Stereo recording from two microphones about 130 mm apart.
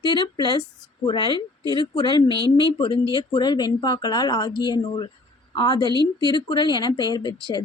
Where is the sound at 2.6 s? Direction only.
40° left (ahead or behind).